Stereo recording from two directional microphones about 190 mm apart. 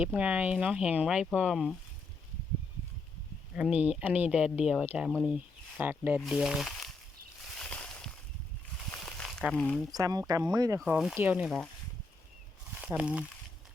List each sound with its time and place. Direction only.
0.0 s speech: 10° right (ahead or behind)
3.5 s speech: 5° right (ahead or behind)
7.4 s a sound: 5° left (ahead or behind)
9.9 s speech: 20° right (ahead or behind)
10.8 s speech: 5° right (ahead or behind)
12.7 s speech: 10° right (ahead or behind)